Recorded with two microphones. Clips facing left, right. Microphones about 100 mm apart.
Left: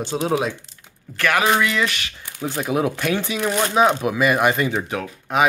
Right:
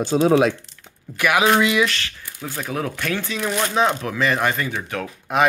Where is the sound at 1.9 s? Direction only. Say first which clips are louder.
Right 1 dB; 15° left (ahead or behind).